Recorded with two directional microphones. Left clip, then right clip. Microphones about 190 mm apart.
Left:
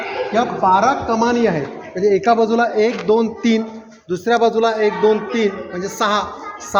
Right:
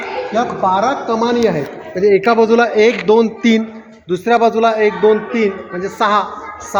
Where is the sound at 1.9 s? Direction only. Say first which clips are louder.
Right 3 dB; 40° right (ahead or behind).